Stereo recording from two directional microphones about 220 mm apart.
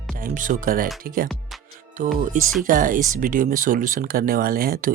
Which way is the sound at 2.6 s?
40° right (ahead or behind).